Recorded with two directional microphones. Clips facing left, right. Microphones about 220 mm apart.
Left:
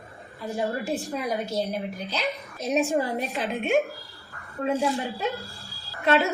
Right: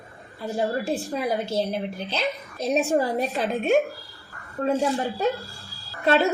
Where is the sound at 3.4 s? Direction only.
35° right (ahead or behind).